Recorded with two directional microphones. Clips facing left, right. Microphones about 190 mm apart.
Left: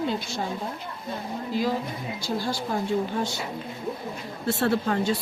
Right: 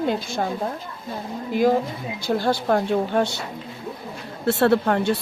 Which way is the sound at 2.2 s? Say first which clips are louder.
Right 8 dB; 60° right (ahead or behind).